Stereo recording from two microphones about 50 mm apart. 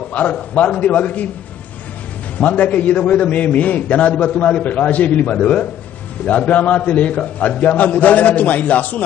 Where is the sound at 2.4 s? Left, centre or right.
Left.